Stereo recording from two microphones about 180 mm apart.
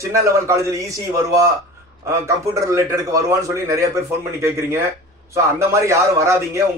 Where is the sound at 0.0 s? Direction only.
15° right (ahead or behind).